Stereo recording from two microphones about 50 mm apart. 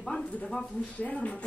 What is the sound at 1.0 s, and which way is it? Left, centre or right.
Speech, left.